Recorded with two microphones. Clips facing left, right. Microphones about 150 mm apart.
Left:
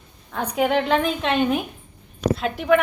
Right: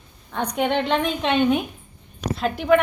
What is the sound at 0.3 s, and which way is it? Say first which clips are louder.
A woman's voice: left 1 dB; centre (ahead or behind).